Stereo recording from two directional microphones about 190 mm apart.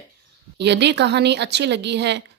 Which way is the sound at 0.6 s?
65° right (ahead or behind).